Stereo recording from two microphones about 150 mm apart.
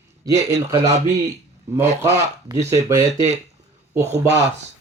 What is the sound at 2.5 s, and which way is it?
Speech, 30° right (ahead or behind).